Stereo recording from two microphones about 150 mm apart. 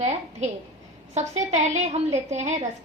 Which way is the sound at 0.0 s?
50° right (ahead or behind).